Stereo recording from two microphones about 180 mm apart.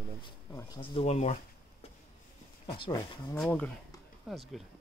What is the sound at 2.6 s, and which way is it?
Speech, 20° left (ahead or behind).